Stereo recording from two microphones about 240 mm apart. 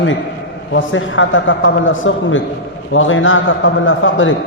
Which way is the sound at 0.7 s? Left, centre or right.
Left.